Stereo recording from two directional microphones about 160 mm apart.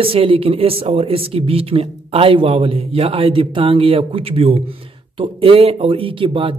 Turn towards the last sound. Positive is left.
turn(degrees=-35)  # may be behind; listen again after turning